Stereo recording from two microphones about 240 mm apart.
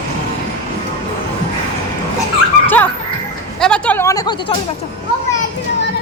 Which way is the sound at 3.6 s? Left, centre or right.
Centre.